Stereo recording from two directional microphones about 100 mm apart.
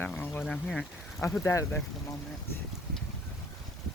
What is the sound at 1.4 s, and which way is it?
Speech, 25° left (ahead or behind).